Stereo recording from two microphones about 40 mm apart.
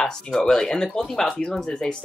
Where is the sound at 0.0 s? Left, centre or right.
Centre.